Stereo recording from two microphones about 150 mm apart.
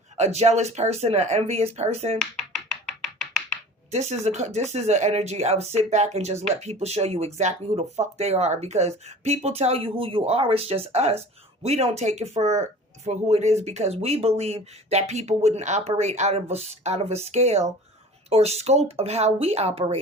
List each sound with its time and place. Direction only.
0.2 s speech: 45° right (ahead or behind)
3.9 s speech: 50° right (ahead or behind)